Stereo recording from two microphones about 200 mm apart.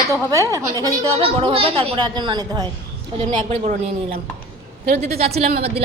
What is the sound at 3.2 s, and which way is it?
Speech, 35° right (ahead or behind).